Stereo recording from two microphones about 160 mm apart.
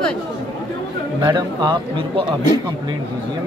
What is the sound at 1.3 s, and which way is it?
A man's voice, 30° right (ahead or behind).